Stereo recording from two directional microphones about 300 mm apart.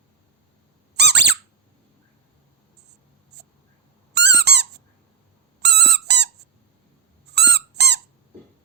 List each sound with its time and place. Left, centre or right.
0.9 s squeak: right
4.1 s squeak: right